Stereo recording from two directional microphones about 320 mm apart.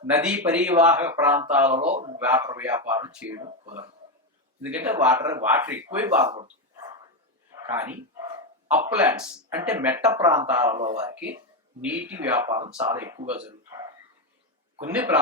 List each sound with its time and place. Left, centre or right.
0.2 s speech: centre
1.9 s speech: centre
2.1 s speech: centre
4.6 s speech: centre
14.8 s speech: centre